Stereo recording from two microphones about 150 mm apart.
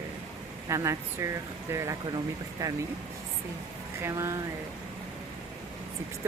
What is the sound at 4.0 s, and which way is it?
Speech, 20° right (ahead or behind).